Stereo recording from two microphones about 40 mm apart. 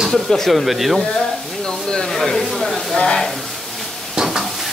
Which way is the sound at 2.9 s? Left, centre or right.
Left.